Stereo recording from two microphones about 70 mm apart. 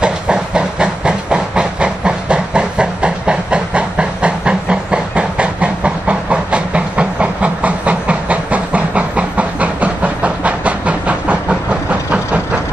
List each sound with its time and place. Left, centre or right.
0.0 s hiss: centre
11.9 s train: centre